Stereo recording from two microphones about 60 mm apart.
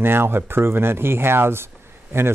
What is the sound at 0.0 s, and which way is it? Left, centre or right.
Speech, right.